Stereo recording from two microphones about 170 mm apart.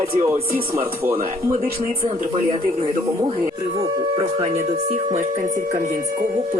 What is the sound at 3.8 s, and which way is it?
Speech, 35° right (ahead or behind).